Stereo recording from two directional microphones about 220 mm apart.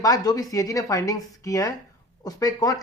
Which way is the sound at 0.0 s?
15° left (ahead or behind).